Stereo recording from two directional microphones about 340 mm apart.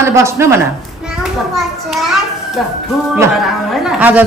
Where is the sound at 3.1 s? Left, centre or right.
Centre.